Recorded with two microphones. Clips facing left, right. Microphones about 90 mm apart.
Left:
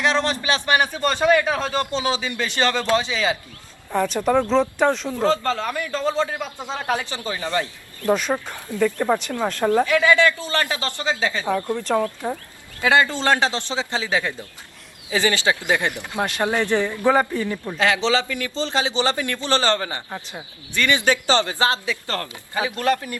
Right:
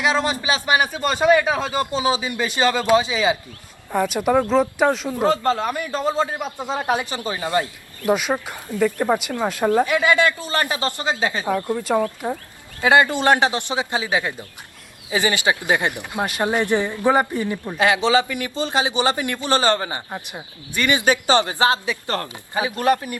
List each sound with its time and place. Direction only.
0.0 s speech: 10° right (ahead or behind)
12.8 s speech: 20° right (ahead or behind)